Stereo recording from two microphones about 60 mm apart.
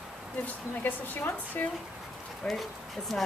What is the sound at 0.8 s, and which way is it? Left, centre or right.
Speech, left.